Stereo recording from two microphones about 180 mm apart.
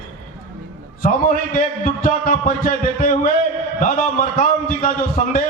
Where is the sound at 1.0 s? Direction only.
50° left (ahead or behind).